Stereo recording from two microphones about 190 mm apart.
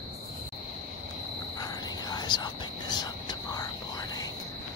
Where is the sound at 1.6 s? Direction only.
20° left (ahead or behind).